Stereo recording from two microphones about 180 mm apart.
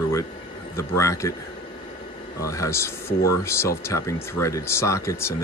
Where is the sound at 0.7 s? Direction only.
15° left (ahead or behind).